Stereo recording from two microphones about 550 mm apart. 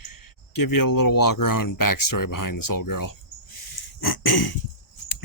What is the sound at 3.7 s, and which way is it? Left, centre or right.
Throat clearing, left.